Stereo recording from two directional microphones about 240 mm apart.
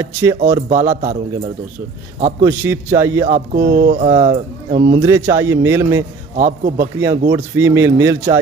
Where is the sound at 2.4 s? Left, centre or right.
Centre.